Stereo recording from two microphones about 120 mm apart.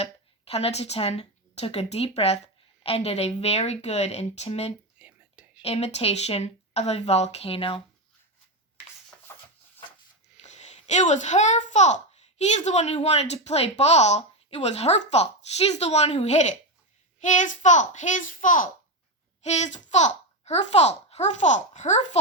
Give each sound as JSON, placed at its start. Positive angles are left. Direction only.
{"t": 0.0, "sound": "speech", "side_deg": 60}
{"t": 4.9, "sound": "whispering", "side_deg": -10}
{"t": 5.6, "sound": "speech", "side_deg": 60}
{"t": 10.4, "sound": "a child's voice", "side_deg": 75}
{"t": 17.2, "sound": "a child's voice", "side_deg": 90}
{"t": 19.4, "sound": "a child's voice", "side_deg": 70}